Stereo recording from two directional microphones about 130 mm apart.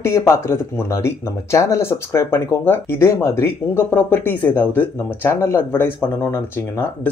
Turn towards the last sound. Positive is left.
turn(degrees=15)  # may be behind; listen again after turning